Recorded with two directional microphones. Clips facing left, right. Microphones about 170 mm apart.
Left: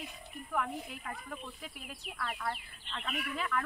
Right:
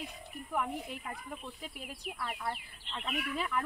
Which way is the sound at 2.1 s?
15° right (ahead or behind).